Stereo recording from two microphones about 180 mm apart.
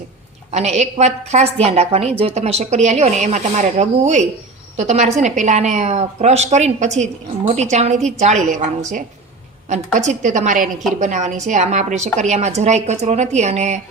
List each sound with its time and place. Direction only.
0.5 s speech: 40° right (ahead or behind)
9.6 s a woman's voice: 40° right (ahead or behind)